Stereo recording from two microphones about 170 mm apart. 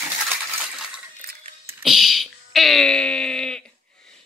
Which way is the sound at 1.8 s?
Centre (ahead or behind).